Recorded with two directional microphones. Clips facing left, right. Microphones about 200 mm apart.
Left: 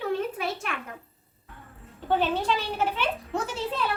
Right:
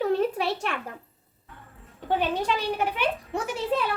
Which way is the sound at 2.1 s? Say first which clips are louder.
Left 1 dB; 15° right (ahead or behind).